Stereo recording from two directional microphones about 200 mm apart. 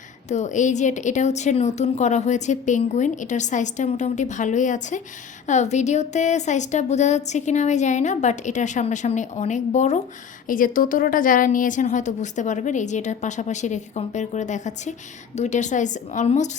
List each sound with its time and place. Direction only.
0.3 s a woman's voice: 35° left (ahead or behind)